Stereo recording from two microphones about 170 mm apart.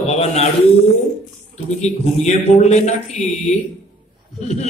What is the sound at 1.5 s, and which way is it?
A man's voice, 40° left (ahead or behind).